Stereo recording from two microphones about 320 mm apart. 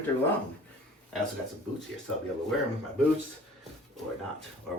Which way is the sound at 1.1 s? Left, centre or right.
Centre.